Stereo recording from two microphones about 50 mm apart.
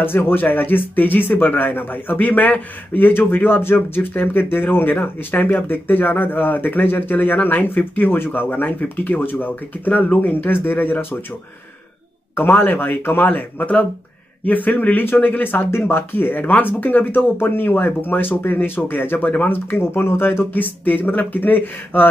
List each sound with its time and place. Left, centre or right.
0.0 s speech: left
12.4 s speech: left